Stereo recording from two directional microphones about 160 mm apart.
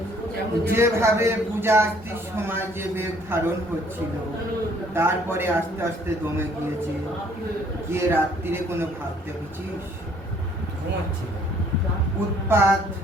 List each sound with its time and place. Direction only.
0.6 s a man's voice: 15° right (ahead or behind)
4.9 s a man's voice: 15° right (ahead or behind)
7.9 s a man's voice: 15° right (ahead or behind)
12.5 s a man's voice: 15° right (ahead or behind)